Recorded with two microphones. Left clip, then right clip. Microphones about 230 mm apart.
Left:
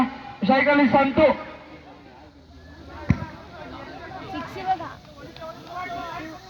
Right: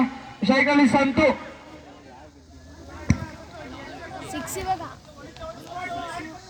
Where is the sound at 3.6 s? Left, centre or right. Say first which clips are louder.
Left 1 dB; right.